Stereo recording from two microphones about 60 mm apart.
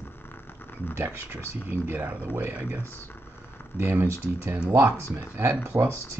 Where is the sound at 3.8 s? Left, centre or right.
Right.